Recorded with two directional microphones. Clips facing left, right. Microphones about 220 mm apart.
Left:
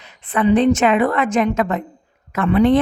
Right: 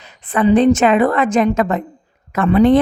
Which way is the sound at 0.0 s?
35° right (ahead or behind).